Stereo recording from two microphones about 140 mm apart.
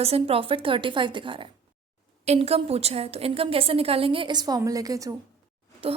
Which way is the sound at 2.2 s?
45° right (ahead or behind).